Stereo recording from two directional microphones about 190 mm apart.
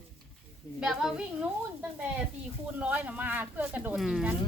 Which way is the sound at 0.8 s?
Centre (ahead or behind).